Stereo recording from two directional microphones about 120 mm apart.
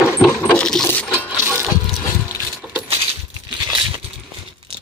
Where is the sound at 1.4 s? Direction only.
20° right (ahead or behind).